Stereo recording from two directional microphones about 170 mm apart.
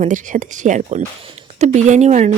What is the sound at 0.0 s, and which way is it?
Speech, 45° right (ahead or behind).